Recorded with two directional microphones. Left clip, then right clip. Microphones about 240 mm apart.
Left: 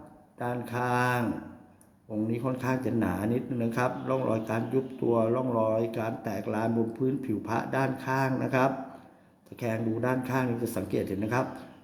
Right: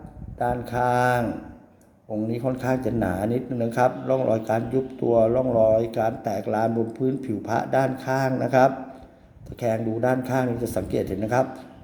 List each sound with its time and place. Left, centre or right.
0.3 s speech: centre
2.3 s speech: centre